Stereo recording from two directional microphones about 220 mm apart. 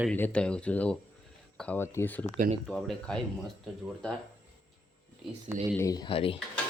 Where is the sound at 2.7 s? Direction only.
5° left (ahead or behind).